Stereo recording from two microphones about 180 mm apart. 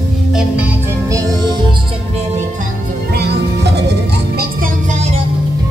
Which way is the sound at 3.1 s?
65° right (ahead or behind).